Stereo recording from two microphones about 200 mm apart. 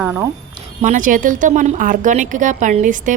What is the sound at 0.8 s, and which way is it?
A woman's voice, 40° right (ahead or behind).